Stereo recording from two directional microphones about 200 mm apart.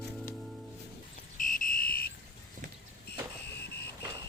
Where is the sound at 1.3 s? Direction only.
45° left (ahead or behind).